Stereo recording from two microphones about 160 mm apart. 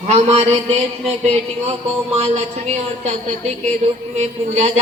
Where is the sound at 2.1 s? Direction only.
45° right (ahead or behind).